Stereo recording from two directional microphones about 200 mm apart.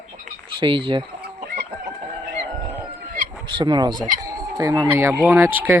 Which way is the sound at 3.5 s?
20° right (ahead or behind).